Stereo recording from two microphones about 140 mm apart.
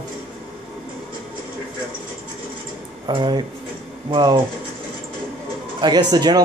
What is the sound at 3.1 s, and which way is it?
Speech, 35° right (ahead or behind).